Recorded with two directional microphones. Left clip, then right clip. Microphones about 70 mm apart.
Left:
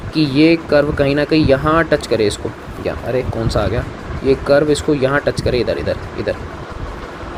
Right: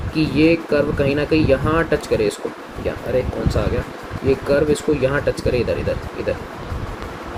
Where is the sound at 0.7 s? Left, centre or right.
Left.